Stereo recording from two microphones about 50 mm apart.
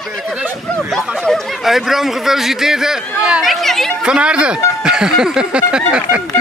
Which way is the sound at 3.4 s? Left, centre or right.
Centre.